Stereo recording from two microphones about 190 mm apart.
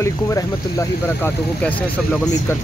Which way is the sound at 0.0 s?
15° left (ahead or behind).